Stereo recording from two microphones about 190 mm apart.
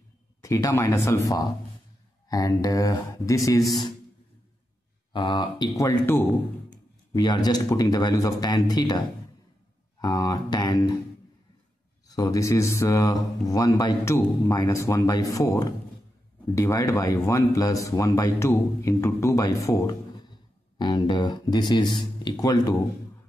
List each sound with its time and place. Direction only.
0.4 s speech: 15° left (ahead or behind)
5.1 s speech: 25° left (ahead or behind)
9.9 s a sound: 20° left (ahead or behind)
12.1 s speech: 20° left (ahead or behind)
16.5 s speech: 15° left (ahead or behind)